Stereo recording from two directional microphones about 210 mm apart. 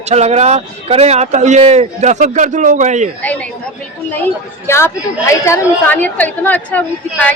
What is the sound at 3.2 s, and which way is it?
A woman's voice, 5° left (ahead or behind).